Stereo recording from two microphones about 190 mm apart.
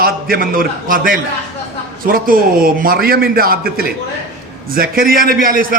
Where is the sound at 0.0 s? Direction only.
50° right (ahead or behind).